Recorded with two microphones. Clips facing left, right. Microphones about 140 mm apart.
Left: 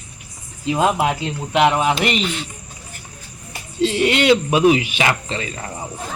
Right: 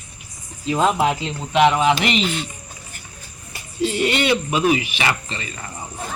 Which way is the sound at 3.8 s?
90° left.